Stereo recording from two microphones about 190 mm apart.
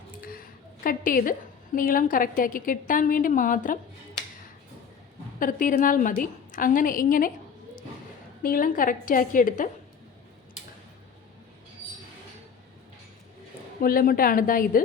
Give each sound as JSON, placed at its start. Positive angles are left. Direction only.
{"t": 0.2, "sound": "a sound", "side_deg": 50}
{"t": 0.9, "sound": "a woman's voice", "side_deg": 45}
{"t": 5.4, "sound": "a woman's voice", "side_deg": 45}
{"t": 8.4, "sound": "a woman's voice", "side_deg": 45}
{"t": 13.8, "sound": "a woman's voice", "side_deg": 50}